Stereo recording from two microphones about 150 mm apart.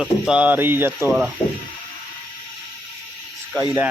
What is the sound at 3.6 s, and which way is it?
Speech, 20° right (ahead or behind).